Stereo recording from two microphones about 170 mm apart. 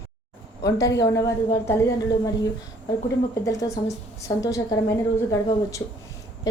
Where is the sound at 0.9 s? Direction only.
20° left (ahead or behind).